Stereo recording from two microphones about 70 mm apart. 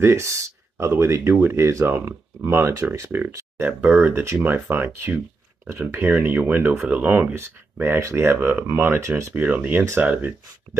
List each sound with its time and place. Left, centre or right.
0.0 s speech: right
3.1 s speech: right
3.8 s speech: right
5.9 s speech: right
9.3 s speech: right